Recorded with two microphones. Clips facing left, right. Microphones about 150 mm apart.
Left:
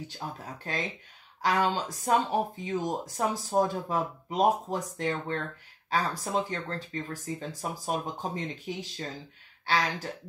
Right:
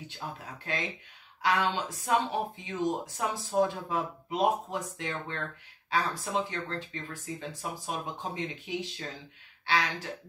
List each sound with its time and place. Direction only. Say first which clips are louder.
0.7 s speech: even; 40° left (ahead or behind)